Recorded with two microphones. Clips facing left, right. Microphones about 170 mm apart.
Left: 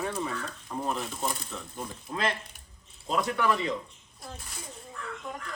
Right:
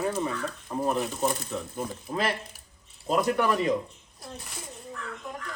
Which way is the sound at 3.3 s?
45° right (ahead or behind).